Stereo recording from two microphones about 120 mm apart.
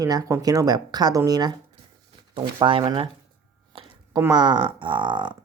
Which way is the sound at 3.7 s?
50° right (ahead or behind).